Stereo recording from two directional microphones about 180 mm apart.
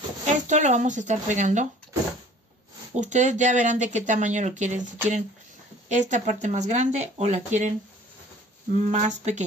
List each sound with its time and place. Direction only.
0.3 s speech: 40° right (ahead or behind)
2.9 s speech: 40° right (ahead or behind)
8.7 s speech: 40° right (ahead or behind)